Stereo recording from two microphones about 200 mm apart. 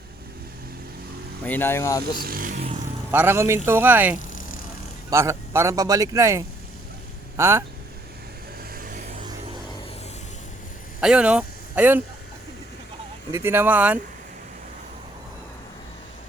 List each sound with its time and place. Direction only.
1.5 s speech: 10° left (ahead or behind)
2.1 s speech: 45° right (ahead or behind)
3.1 s speech: 10° right (ahead or behind)
8.7 s music: 45° right (ahead or behind)
11.0 s speech: 5° right (ahead or behind)
13.3 s speech: 10° right (ahead or behind)